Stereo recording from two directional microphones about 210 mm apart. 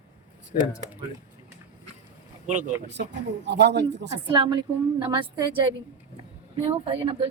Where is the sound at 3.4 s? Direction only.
55° right (ahead or behind).